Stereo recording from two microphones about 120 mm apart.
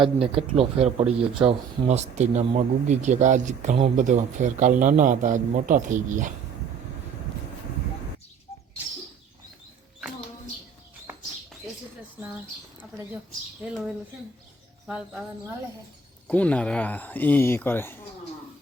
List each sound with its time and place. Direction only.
0.0 s a man's voice: 50° right (ahead or behind); by 6.3 s 90° right
14.8 s speech: 5° right (ahead or behind)
16.2 s speech: 10° left (ahead or behind)